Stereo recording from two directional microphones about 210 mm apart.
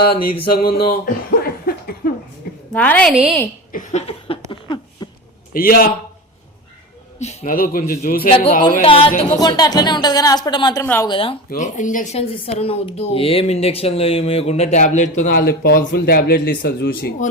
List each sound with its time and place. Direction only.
0.5 s a man's voice: 45° left (ahead or behind)
1.7 s a sound: 45° left (ahead or behind)
2.7 s a woman's voice: 5° left (ahead or behind)
3.7 s a sound: 35° left (ahead or behind)
5.0 s a sound: 20° left (ahead or behind)
5.5 s a man's voice: 45° left (ahead or behind)
7.2 s a man's voice: 35° left (ahead or behind)
8.3 s a woman's voice: 30° left (ahead or behind)
10.8 s speech: 10° left (ahead or behind)
11.1 s a woman's voice: 25° left (ahead or behind)
11.4 s speech: 40° left (ahead or behind)